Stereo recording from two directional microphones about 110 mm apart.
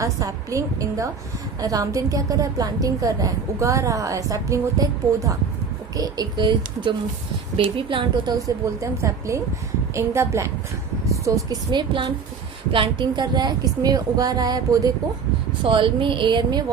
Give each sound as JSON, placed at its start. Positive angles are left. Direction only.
{"t": 0.0, "sound": "a woman's voice", "side_deg": -30}
{"t": 6.0, "sound": "a woman's voice", "side_deg": -40}
{"t": 8.3, "sound": "a woman's voice", "side_deg": -30}
{"t": 11.0, "sound": "a sound", "side_deg": -30}
{"t": 11.7, "sound": "a woman's voice", "side_deg": -40}
{"t": 15.6, "sound": "a woman's voice", "side_deg": -50}